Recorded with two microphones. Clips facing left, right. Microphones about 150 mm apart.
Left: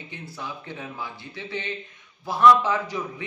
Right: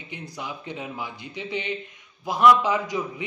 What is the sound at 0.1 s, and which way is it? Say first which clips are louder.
A man's voice: right 2 dB; 15° right (ahead or behind).